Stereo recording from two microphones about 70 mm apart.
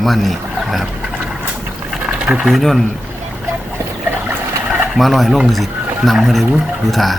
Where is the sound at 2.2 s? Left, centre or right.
Centre.